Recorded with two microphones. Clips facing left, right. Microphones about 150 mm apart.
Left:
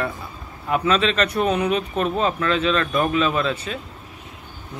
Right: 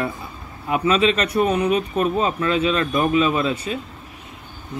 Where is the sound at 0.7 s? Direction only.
5° right (ahead or behind).